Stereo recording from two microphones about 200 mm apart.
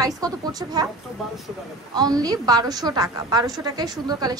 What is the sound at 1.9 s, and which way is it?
A woman's voice, 20° right (ahead or behind).